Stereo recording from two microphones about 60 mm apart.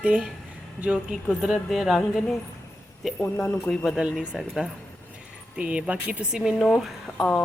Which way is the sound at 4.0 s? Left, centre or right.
Centre.